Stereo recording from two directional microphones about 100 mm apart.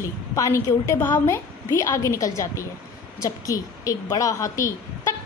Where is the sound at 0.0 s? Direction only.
35° left (ahead or behind).